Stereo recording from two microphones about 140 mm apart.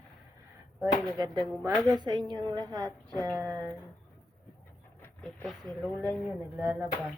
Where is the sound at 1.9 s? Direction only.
30° right (ahead or behind).